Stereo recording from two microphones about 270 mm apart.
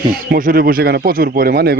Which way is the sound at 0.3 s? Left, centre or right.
Right.